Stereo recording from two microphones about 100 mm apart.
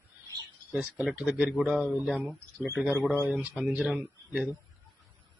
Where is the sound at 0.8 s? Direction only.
15° right (ahead or behind).